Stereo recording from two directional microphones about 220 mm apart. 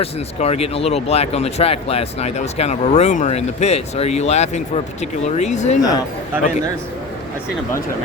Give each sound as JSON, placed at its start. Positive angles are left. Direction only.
{"t": 0.0, "sound": "speech", "side_deg": 30}